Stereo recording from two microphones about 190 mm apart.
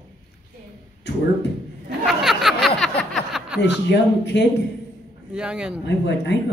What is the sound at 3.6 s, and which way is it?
Speech, 65° left (ahead or behind).